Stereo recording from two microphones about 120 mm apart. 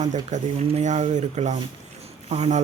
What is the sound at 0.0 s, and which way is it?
Speech, 80° right.